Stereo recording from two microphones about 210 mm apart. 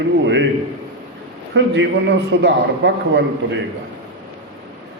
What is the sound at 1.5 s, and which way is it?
A man's voice, 60° right (ahead or behind).